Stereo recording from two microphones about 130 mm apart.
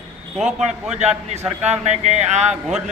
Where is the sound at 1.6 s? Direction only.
60° right (ahead or behind).